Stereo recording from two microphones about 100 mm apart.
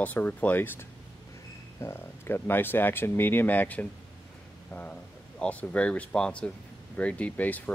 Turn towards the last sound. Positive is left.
turn(degrees=15)  # may be behind; listen again after turning